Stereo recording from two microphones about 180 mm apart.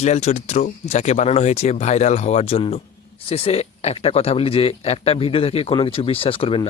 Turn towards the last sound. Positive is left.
turn(degrees=30)  # may be behind; listen again after turning